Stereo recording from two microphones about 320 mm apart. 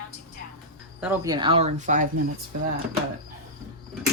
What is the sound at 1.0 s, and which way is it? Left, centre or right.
Speech, centre.